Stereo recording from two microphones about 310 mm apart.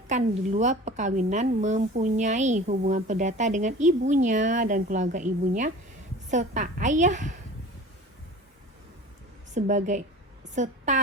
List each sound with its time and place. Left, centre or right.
0.1 s a woman's voice: right
9.6 s a woman's voice: right